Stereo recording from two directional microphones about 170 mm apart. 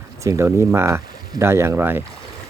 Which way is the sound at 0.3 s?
15° right (ahead or behind).